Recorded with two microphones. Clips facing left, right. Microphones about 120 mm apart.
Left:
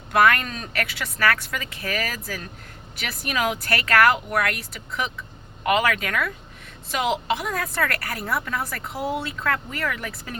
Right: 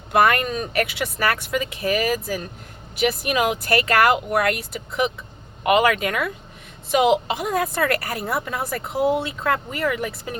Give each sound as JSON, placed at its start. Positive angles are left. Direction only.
{"t": 0.1, "sound": "a woman's voice", "side_deg": -15}
{"t": 5.6, "sound": "a woman's voice", "side_deg": -20}